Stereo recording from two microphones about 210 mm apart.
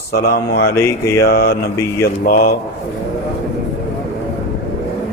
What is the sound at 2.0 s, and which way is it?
Mantra, 45° left (ahead or behind).